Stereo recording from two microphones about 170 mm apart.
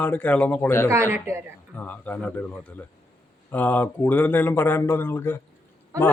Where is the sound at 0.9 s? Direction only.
15° right (ahead or behind).